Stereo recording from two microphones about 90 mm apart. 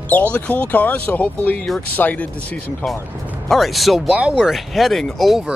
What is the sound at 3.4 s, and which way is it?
Speech, centre (ahead or behind).